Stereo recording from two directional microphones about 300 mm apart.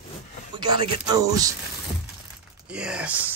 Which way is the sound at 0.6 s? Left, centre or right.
Centre.